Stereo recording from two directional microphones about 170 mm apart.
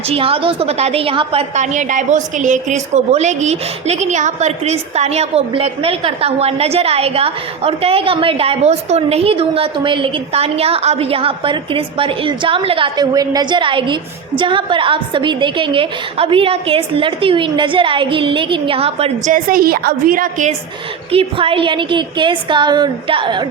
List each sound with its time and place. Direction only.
0.1 s a woman's voice: 35° right (ahead or behind)
19.3 s a woman's voice: 55° right (ahead or behind)
21.1 s a woman's voice: 35° right (ahead or behind)